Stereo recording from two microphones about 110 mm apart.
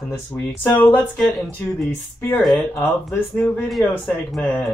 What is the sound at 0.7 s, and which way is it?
Speech, 20° left (ahead or behind).